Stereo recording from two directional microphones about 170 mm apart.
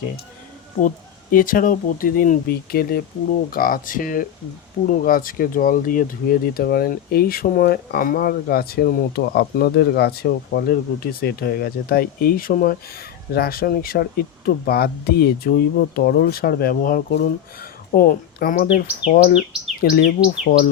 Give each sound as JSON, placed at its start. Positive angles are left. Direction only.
{"t": 1.3, "sound": "speech", "side_deg": 55}
{"t": 20.2, "sound": "bird", "side_deg": 50}